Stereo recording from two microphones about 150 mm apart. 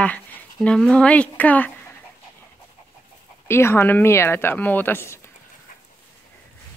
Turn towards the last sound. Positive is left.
turn(degrees=15)  # may be behind; listen again after turning